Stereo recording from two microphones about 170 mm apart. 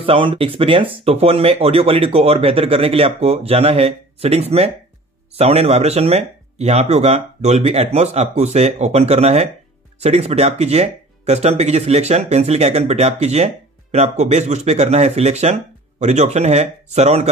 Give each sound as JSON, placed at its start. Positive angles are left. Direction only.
{"t": 0.0, "sound": "speech", "side_deg": -30}